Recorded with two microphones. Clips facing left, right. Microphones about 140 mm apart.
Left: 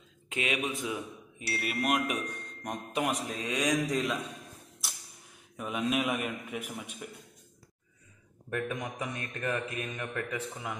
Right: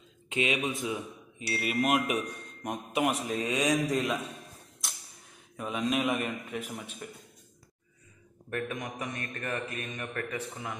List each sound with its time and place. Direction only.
0.5 s a man's voice: centre (ahead or behind)
5.6 s a man's voice: 5° left (ahead or behind)
8.5 s a man's voice: 15° left (ahead or behind)